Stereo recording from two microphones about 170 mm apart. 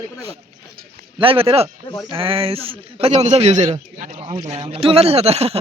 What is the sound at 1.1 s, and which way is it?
A man's voice, 35° right (ahead or behind).